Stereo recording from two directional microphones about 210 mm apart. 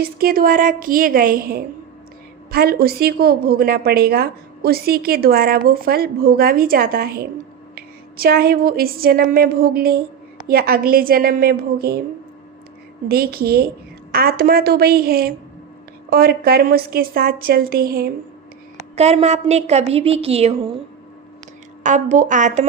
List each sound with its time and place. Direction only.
0.0 s a woman's voice: 45° right (ahead or behind)
13.1 s a woman's voice: 45° right (ahead or behind)
18.9 s a woman's voice: 30° right (ahead or behind)
21.8 s a woman's voice: 35° right (ahead or behind)